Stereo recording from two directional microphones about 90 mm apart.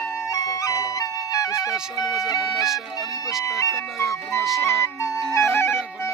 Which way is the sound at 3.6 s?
35° left (ahead or behind).